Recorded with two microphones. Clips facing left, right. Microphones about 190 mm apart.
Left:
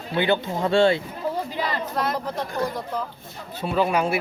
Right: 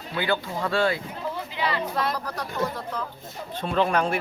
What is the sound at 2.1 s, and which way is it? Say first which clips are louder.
Speech: left 4 dB; 20° left (ahead or behind).